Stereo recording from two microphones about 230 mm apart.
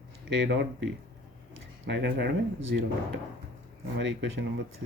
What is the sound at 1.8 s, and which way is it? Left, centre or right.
Speech, right.